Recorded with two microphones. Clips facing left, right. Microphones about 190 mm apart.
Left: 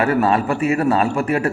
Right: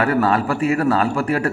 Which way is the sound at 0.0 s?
25° left (ahead or behind).